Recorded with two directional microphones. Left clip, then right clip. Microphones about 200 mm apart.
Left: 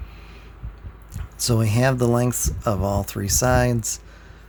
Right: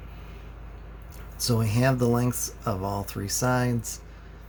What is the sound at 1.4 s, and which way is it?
Speech, 45° left (ahead or behind).